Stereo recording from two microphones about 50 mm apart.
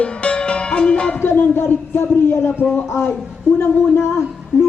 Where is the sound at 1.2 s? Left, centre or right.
Left.